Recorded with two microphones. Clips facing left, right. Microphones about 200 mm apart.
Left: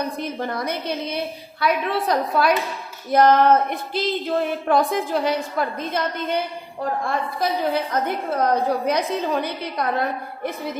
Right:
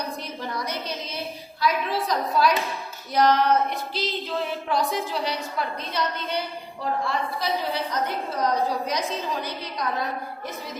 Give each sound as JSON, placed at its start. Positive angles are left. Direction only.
{"t": 0.2, "sound": "a woman's voice", "side_deg": 55}